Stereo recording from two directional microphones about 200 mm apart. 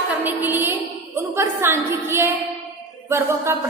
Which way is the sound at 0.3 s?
10° right (ahead or behind).